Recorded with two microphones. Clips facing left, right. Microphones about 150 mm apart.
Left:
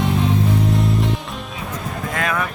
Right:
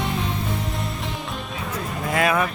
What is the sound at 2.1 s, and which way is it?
Vehicle, 10° right (ahead or behind).